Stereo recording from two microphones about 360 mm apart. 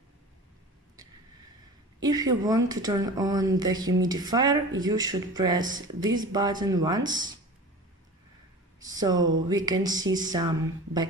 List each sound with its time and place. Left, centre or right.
2.0 s speech: centre
8.8 s speech: centre